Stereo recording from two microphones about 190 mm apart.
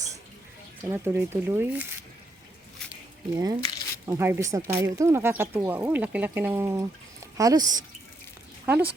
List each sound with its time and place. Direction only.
0.8 s speech: 10° right (ahead or behind)
3.6 s a sound: 20° left (ahead or behind)
4.0 s speech: 15° right (ahead or behind)
8.6 s speech: 10° right (ahead or behind)